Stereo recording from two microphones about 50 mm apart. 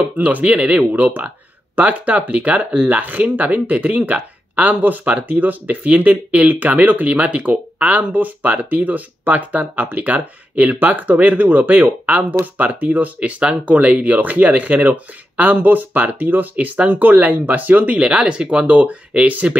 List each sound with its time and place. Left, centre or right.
0.2 s speech: right
17.9 s speech: centre